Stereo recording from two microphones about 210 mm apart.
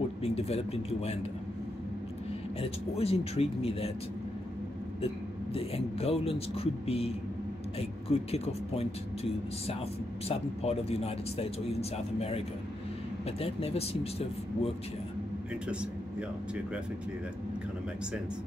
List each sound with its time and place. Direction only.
0.2 s speech: 30° left (ahead or behind)
2.6 s speech: 30° left (ahead or behind)
5.0 s speech: 25° left (ahead or behind)
15.7 s speech: 5° right (ahead or behind)